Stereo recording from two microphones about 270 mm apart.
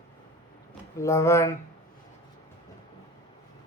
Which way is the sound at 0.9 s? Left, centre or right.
Centre.